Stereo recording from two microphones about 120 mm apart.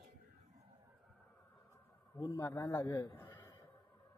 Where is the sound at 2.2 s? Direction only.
30° left (ahead or behind).